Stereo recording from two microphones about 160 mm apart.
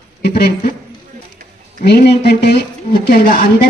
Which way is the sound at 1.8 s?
90° left.